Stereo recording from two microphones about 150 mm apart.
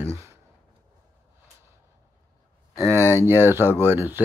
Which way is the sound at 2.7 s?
20° right (ahead or behind).